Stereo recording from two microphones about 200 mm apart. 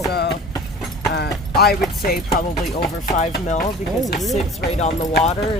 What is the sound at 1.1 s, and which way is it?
Speech, 55° left (ahead or behind).